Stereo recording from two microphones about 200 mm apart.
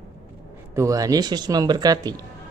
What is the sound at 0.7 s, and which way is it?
Speech, 15° right (ahead or behind).